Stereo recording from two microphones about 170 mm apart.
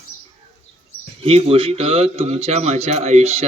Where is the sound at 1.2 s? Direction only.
35° right (ahead or behind).